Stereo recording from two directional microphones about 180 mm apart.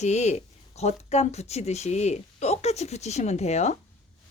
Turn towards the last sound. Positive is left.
turn(degrees=40)  # may be behind; listen again after turning